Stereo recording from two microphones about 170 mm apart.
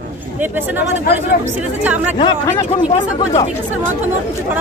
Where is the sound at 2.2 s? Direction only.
30° left (ahead or behind).